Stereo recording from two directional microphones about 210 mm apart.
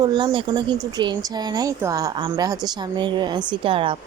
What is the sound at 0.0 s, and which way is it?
Speech, 20° right (ahead or behind).